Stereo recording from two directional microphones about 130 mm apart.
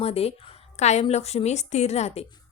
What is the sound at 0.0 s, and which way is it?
A woman's voice, 50° left (ahead or behind).